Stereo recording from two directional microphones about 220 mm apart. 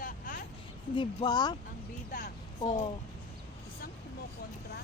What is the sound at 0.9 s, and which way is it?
Speech, 20° left (ahead or behind).